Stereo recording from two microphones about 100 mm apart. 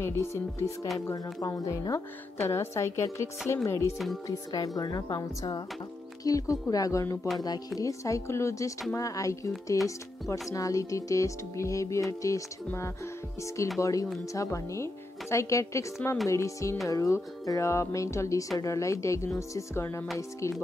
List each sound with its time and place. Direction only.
0.0 s speech: 30° left (ahead or behind)
1.0 s music: 35° left (ahead or behind)
2.4 s speech: 25° left (ahead or behind)
3.6 s music: 30° left (ahead or behind)
4.7 s speech: 40° left (ahead or behind)
6.2 s music: 35° left (ahead or behind)
7.3 s music: 40° left (ahead or behind)
14.3 s speech: 30° left (ahead or behind)
16.3 s music: 30° left (ahead or behind)
18.6 s speech: 30° left (ahead or behind)